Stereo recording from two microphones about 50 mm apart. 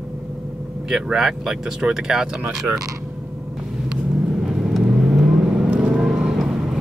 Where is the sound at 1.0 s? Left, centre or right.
Centre.